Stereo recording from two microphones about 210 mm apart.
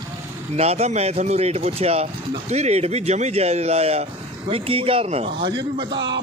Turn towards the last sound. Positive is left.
turn(degrees=-25)  # may be behind; listen again after turning